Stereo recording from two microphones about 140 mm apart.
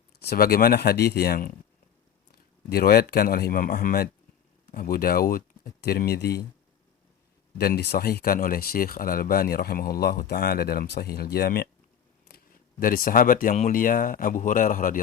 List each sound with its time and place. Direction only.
0.3 s speech: 90° left
2.7 s speech: 90° left
7.6 s speech: 90° left
12.8 s speech: 90° left